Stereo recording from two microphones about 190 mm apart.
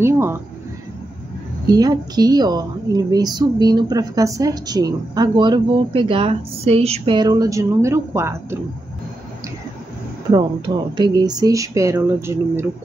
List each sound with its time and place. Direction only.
0.0 s a sound: 15° right (ahead or behind)
1.7 s a woman's voice: 20° right (ahead or behind)
10.3 s speech: 20° right (ahead or behind)